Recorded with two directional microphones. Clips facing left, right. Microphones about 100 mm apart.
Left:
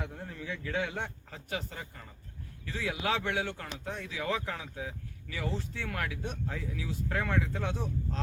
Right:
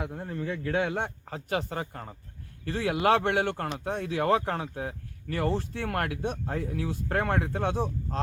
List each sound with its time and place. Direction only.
0.0 s a man's voice: 40° right (ahead or behind)
1.3 s speech: 65° right (ahead or behind)